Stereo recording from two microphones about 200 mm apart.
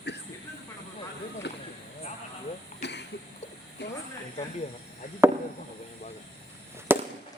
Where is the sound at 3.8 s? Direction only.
60° left (ahead or behind).